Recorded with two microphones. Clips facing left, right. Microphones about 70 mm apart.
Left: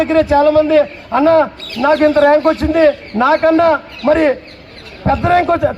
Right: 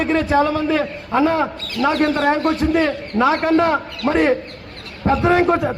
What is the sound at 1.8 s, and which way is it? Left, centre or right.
A man's voice, centre.